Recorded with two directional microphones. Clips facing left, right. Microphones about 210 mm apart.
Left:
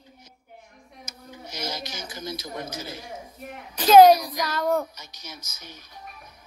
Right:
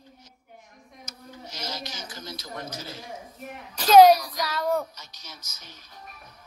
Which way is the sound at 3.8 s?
Centre (ahead or behind).